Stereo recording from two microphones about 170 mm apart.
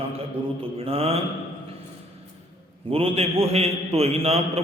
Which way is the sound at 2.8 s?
35° right (ahead or behind).